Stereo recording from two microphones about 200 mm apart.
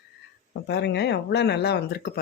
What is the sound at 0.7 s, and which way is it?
Speech, 55° left (ahead or behind).